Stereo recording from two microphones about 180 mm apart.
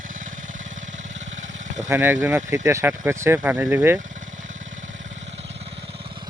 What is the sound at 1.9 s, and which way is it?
Speech, 10° right (ahead or behind).